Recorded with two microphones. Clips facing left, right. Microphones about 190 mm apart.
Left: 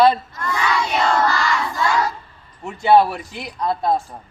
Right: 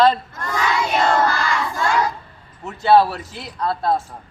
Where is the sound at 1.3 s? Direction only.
50° right (ahead or behind).